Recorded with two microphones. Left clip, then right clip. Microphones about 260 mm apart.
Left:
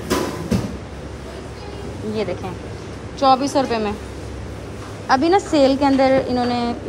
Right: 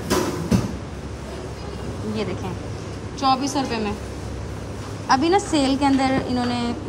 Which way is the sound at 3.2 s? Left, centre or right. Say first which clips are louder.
Left 5 dB; centre.